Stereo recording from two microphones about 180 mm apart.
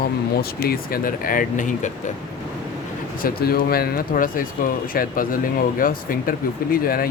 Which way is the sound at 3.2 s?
55° left (ahead or behind).